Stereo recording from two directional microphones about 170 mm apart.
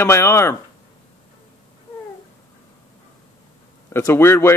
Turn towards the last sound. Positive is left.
turn(degrees=15)  # may be behind; listen again after turning